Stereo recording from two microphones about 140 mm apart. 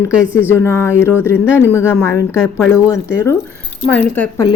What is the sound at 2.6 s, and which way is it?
Speech, 10° right (ahead or behind).